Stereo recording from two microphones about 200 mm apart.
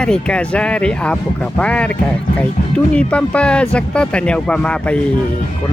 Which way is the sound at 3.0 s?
5° left (ahead or behind).